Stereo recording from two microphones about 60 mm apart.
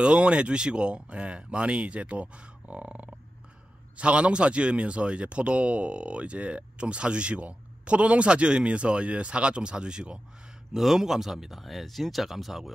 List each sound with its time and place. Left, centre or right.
0.0 s speech: centre
10.7 s speech: centre